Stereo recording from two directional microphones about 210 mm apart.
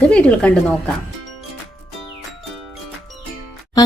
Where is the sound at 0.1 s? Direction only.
5° left (ahead or behind).